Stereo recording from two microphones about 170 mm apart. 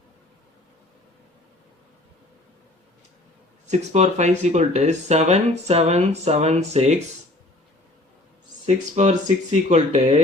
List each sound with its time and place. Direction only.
3.7 s speech: 40° right (ahead or behind)
8.6 s speech: 40° right (ahead or behind)